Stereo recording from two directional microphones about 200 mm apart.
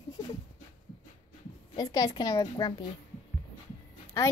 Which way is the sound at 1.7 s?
20° left (ahead or behind).